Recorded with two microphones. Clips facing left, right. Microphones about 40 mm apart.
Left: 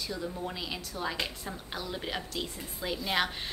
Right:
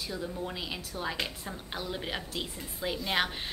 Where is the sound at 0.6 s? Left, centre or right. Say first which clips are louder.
Even; centre.